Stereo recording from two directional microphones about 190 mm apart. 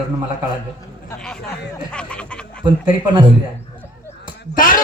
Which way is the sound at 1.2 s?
5° left (ahead or behind).